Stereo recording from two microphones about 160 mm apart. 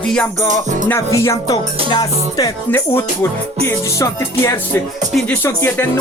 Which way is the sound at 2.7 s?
15° left (ahead or behind).